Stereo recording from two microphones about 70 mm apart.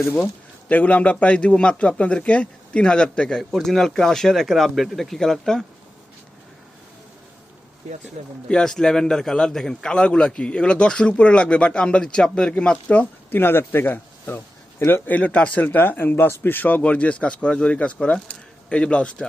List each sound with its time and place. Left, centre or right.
0.7 s a man's voice: left; by 5.6 s centre
8.4 s a man's voice: centre
13.4 s a man's voice: left; by 19.1 s centre